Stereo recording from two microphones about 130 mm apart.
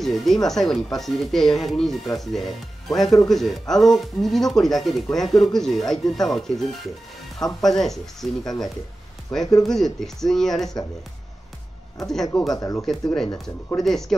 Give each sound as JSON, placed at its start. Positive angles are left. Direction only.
{"t": 0.0, "sound": "speech", "side_deg": 0}
{"t": 12.0, "sound": "speech", "side_deg": 0}
{"t": 12.4, "sound": "speech", "side_deg": 30}
{"t": 12.8, "sound": "speech", "side_deg": 5}